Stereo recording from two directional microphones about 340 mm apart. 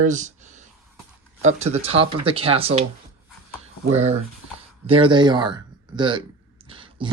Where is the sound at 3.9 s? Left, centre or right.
Centre.